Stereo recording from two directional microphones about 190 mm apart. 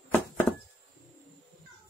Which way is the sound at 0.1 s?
10° left (ahead or behind).